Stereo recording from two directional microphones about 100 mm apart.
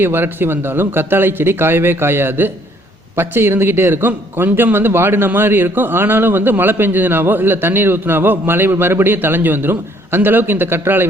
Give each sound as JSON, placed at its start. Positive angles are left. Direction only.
{"t": 0.0, "sound": "a man's voice", "side_deg": -20}